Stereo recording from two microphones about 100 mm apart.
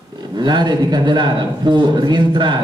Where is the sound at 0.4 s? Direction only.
45° right (ahead or behind).